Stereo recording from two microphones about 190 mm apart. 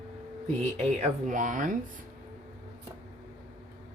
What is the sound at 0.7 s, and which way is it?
Speech, 35° right (ahead or behind).